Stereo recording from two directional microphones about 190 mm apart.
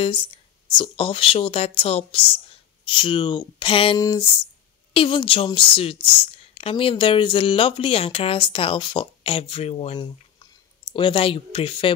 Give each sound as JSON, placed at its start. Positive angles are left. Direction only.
{"t": 0.0, "sound": "speech", "side_deg": 25}